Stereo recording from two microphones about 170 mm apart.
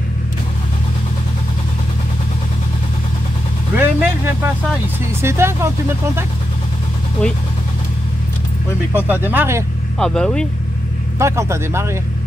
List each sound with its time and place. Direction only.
3.7 s vehicle: 10° right (ahead or behind)
5.2 s speech: 15° right (ahead or behind)
8.9 s speech: 10° right (ahead or behind)
9.9 s speech: 5° left (ahead or behind)
11.1 s speech: 15° right (ahead or behind)